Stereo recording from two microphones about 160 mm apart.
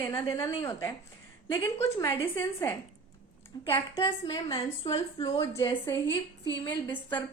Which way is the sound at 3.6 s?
15° left (ahead or behind).